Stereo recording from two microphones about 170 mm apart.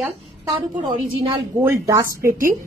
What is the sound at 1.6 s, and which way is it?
Speech, 15° right (ahead or behind).